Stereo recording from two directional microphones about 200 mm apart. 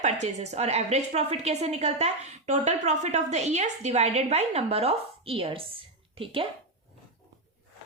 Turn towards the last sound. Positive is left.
turn(degrees=-25)  # may be behind; listen again after turning